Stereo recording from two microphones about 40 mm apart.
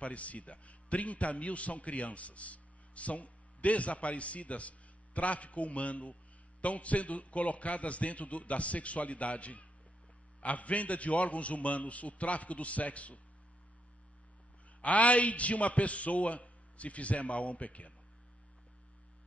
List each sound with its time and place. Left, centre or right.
0.0 s a man's voice: left
14.8 s a man's voice: left